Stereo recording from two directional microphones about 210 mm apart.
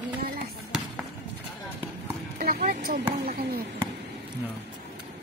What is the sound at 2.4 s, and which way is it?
Speech, 45° right (ahead or behind).